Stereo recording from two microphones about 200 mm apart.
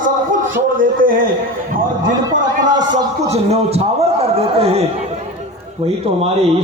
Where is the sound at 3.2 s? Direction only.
30° right (ahead or behind).